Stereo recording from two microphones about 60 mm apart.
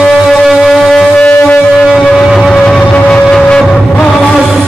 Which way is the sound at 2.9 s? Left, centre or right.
Centre.